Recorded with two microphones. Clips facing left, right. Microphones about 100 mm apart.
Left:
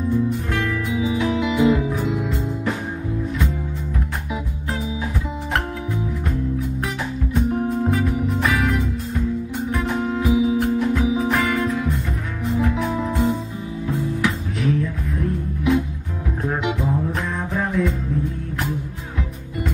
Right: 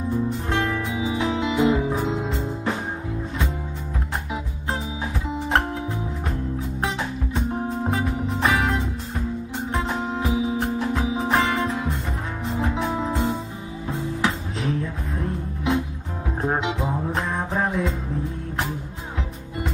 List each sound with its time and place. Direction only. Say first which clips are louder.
0.5 s music: left 1 dB; 30° right (ahead or behind)
7.3 s music: left 6 dB; 25° right (ahead or behind)
9.8 s music: left 4 dB; 20° right (ahead or behind)